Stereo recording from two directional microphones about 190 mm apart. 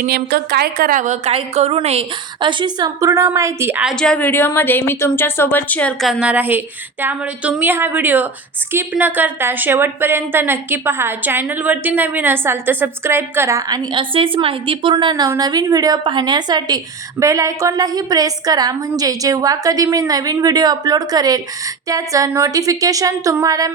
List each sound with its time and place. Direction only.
0.0 s a woman's voice: 55° right (ahead or behind); by 3.9 s 10° right (ahead or behind)
3.9 s a woman's voice: 5° left (ahead or behind); by 23.7 s 20° right (ahead or behind)